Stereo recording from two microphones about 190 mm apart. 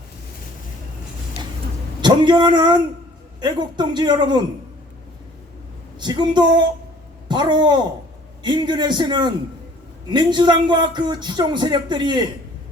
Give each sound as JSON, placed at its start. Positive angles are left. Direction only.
{"t": 2.0, "sound": "speech", "side_deg": -25}
{"t": 6.0, "sound": "speech", "side_deg": -25}